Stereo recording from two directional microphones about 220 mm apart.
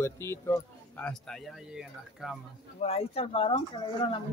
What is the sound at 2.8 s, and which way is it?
Speech, 25° left (ahead or behind).